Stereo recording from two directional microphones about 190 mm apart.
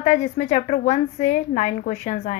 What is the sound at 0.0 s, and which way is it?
A woman's voice, 40° left (ahead or behind).